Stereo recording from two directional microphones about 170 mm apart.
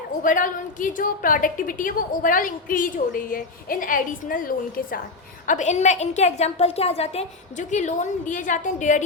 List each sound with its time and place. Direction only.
0.2 s a woman's voice: 50° left (ahead or behind)